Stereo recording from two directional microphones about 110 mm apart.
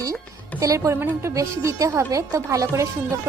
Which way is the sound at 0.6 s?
30° right (ahead or behind).